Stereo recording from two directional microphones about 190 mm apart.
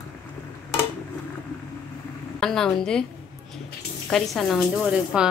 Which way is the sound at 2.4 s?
5° left (ahead or behind).